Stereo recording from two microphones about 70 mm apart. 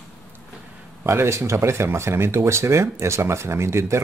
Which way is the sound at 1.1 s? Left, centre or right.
Right.